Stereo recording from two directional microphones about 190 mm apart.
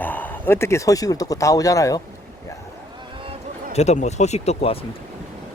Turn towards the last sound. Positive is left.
turn(degrees=30)  # may be behind; listen again after turning